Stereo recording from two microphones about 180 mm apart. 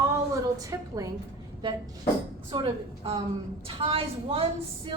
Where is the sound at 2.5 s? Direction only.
30° right (ahead or behind).